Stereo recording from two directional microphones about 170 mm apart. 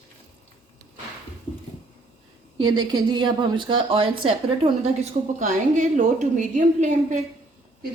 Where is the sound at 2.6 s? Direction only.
25° right (ahead or behind); by 7.2 s 45° right (ahead or behind).